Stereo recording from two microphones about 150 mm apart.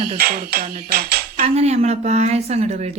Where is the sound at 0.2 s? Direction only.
90° right.